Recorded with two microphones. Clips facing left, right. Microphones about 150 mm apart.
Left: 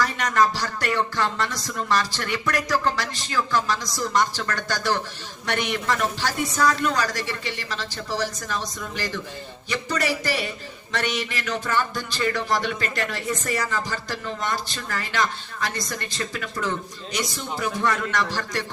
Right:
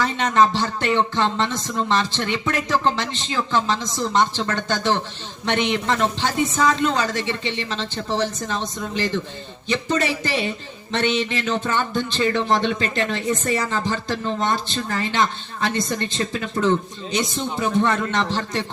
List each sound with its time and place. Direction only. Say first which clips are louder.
0.0 s music: right 3 dB; 25° right (ahead or behind)